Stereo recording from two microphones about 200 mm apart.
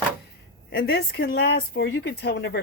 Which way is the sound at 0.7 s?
50° left (ahead or behind).